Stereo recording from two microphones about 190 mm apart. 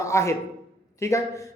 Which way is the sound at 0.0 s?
15° left (ahead or behind).